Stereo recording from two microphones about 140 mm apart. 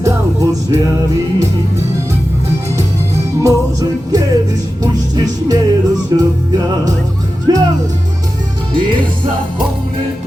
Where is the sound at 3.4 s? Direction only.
25° right (ahead or behind).